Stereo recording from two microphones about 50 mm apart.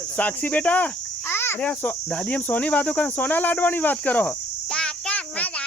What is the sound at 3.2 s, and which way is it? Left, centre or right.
Cricket, left.